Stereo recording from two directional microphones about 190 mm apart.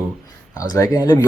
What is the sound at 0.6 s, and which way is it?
Speech, 20° left (ahead or behind).